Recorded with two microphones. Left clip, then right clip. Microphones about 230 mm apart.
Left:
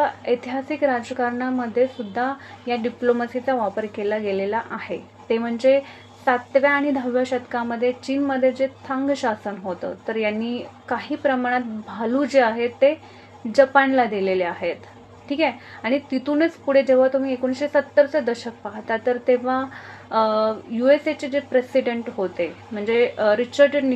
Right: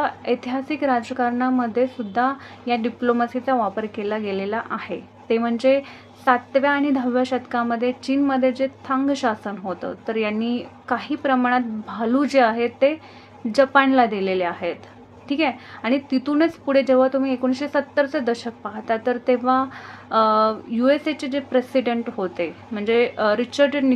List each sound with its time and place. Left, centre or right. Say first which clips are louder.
0.0 s a woman's voice: left 1 dB; centre